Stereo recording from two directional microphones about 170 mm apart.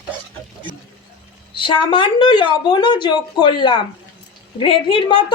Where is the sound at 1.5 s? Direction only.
30° left (ahead or behind).